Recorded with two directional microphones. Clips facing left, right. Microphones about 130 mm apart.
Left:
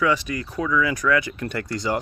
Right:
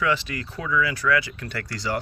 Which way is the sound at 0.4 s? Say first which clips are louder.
Left 3 dB; 15° left (ahead or behind).